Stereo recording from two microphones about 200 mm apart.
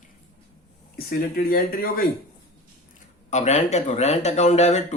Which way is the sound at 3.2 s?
35° left (ahead or behind).